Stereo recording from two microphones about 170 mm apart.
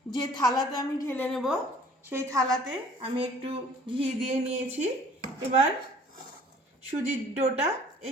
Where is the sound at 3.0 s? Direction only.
35° right (ahead or behind).